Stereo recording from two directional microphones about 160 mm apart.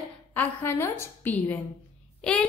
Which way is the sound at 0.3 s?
15° left (ahead or behind).